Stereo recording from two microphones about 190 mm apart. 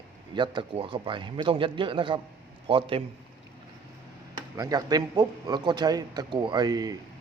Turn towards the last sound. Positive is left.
turn(degrees=-20)  # may be behind; listen again after turning